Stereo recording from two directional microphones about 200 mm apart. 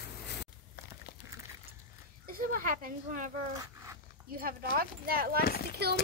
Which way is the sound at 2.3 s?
45° right (ahead or behind).